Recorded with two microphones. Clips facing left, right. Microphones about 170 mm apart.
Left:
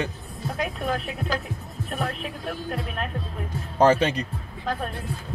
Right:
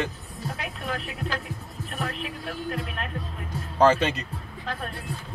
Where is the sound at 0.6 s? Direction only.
40° left (ahead or behind).